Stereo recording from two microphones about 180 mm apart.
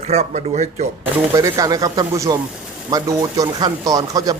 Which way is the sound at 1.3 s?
20° right (ahead or behind).